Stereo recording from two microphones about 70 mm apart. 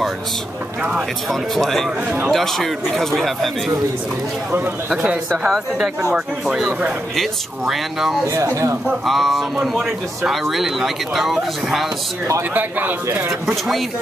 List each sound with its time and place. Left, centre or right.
1.3 s speech: centre
2.0 s speech: right
2.3 s speech: centre
4.8 s speech: centre
6.1 s speech: centre
8.3 s speech: right
9.0 s speech: centre
12.5 s speech: right